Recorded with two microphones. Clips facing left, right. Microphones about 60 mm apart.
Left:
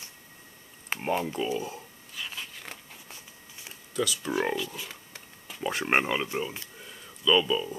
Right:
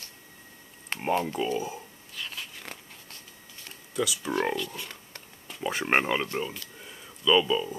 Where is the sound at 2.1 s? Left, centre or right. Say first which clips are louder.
Even; centre.